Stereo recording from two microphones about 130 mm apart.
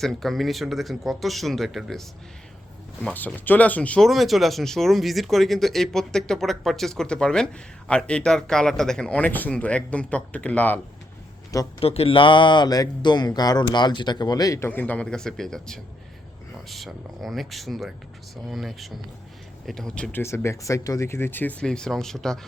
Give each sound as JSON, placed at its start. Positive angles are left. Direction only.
{"t": 0.0, "sound": "speech", "side_deg": 0}
{"t": 11.8, "sound": "speech", "side_deg": 50}
{"t": 14.7, "sound": "speech", "side_deg": 15}
{"t": 20.2, "sound": "speech", "side_deg": 20}